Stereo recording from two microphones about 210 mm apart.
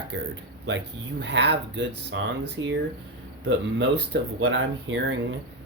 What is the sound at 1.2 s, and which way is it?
Speech, 55° right (ahead or behind).